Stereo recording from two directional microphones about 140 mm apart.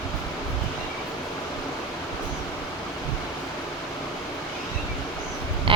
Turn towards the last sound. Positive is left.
turn(degrees=-40)  # may be behind; listen again after turning